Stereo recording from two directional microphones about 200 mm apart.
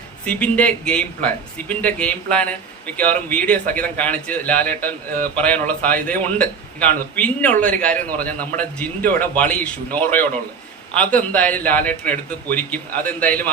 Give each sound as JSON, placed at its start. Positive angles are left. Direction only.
{"t": 0.3, "sound": "speech", "side_deg": 5}